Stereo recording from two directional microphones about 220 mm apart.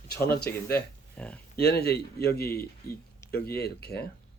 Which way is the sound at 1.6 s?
45° left (ahead or behind).